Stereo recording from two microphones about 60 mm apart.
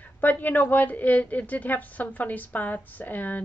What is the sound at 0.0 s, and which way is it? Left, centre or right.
A woman's voice, left.